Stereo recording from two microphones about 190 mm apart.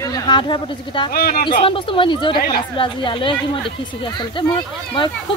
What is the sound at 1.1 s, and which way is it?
Speech, 55° left (ahead or behind).